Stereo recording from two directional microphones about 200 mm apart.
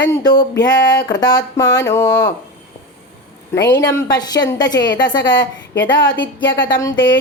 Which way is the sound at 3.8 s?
20° left (ahead or behind).